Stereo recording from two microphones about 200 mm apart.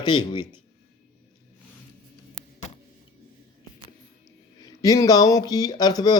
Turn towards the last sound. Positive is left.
turn(degrees=20)  # may be behind; listen again after turning